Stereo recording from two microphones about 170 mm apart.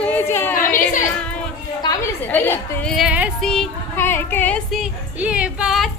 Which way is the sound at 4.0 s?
10° left (ahead or behind).